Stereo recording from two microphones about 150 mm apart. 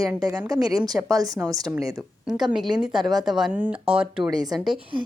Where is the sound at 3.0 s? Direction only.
25° right (ahead or behind).